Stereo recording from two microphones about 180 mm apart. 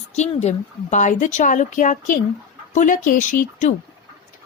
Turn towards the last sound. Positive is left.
turn(degrees=45)  # may be behind; listen again after turning